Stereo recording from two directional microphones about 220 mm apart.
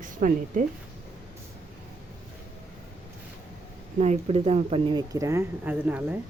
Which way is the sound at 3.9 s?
30° right (ahead or behind).